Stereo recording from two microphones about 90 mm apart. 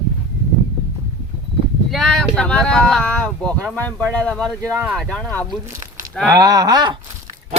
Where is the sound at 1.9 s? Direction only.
5° left (ahead or behind).